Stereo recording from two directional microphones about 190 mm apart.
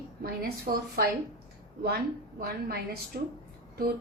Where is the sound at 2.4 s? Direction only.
55° right (ahead or behind).